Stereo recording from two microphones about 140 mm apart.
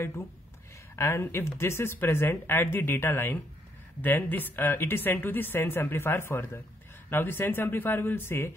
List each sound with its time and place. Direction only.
0.9 s speech: 20° left (ahead or behind)